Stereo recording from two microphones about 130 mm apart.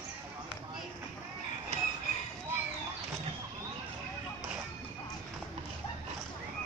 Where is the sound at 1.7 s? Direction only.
55° right (ahead or behind).